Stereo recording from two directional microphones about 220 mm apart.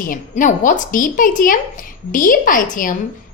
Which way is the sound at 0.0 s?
40° left (ahead or behind).